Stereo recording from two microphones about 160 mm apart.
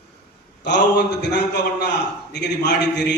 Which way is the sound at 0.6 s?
90° left.